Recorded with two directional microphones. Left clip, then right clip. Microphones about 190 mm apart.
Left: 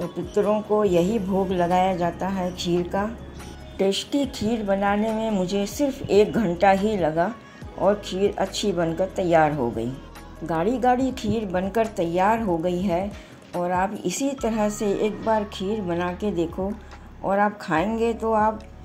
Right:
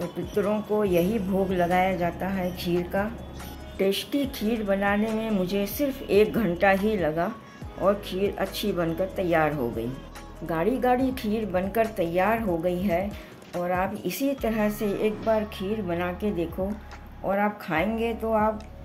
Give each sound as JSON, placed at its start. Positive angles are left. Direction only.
{"t": 0.0, "sound": "speech", "side_deg": 5}